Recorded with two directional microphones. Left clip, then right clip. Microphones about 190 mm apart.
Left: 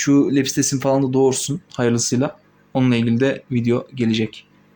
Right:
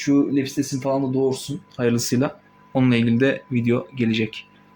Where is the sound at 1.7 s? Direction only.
10° left (ahead or behind).